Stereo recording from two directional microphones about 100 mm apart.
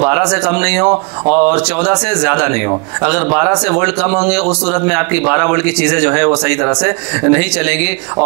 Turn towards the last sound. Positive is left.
turn(degrees=-15)  # may be behind; listen again after turning